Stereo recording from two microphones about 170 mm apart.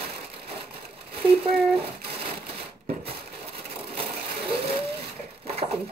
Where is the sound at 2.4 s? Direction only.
70° right (ahead or behind).